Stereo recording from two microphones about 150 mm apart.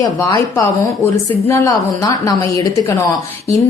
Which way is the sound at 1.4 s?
20° left (ahead or behind).